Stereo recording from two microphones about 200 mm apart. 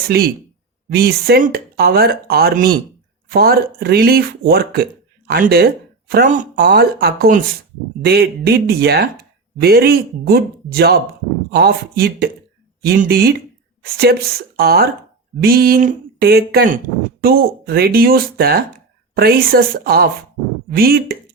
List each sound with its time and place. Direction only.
0.1 s speech: 55° right (ahead or behind)